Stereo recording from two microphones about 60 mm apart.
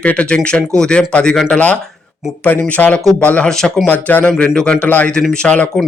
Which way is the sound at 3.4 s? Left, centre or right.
Centre.